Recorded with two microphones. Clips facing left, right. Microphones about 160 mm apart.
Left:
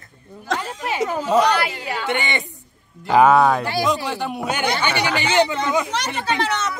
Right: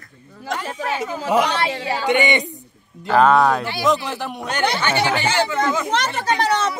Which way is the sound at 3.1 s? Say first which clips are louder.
Left 1 dB; 10° left (ahead or behind).